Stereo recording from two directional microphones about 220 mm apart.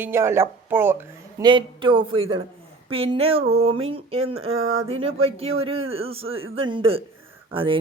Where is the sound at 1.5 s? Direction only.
20° right (ahead or behind).